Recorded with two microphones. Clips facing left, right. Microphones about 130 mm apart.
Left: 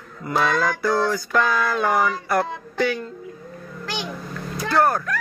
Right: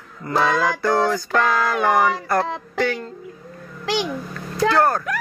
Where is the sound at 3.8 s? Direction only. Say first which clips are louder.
Right 8 dB; 90° right.